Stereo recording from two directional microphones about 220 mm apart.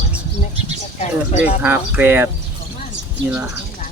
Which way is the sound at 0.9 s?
30° left (ahead or behind).